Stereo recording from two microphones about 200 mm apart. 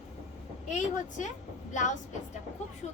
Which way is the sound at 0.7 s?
40° left (ahead or behind).